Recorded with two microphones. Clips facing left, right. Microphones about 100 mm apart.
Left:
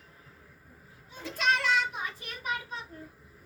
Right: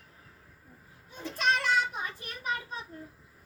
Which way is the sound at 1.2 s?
35° right (ahead or behind).